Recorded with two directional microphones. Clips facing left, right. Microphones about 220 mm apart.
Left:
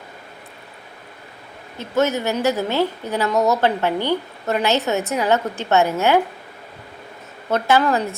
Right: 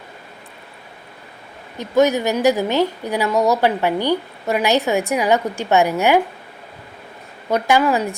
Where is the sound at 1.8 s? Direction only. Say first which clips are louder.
Right 4 dB; 15° right (ahead or behind).